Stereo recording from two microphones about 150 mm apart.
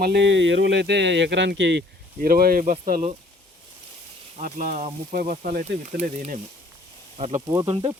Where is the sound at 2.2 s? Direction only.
75° right (ahead or behind).